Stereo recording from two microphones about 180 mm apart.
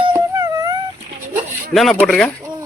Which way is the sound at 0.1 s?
20° right (ahead or behind).